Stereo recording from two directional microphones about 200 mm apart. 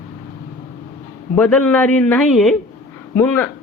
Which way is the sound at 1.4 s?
5° left (ahead or behind).